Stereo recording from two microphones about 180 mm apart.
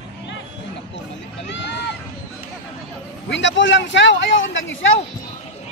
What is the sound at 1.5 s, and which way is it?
Run, 75° left (ahead or behind).